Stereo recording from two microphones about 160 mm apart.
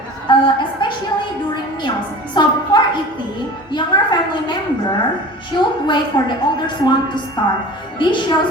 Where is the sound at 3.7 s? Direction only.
30° left (ahead or behind).